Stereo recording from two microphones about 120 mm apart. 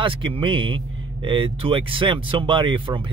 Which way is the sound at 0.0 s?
45° right (ahead or behind).